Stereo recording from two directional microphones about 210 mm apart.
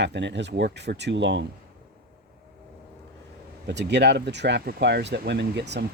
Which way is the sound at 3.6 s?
55° right (ahead or behind).